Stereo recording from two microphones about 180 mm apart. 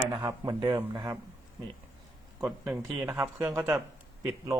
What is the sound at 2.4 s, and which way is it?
Speech, 10° right (ahead or behind).